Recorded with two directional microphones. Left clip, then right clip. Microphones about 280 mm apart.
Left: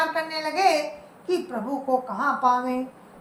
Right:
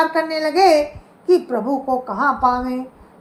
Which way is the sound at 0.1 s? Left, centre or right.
Right.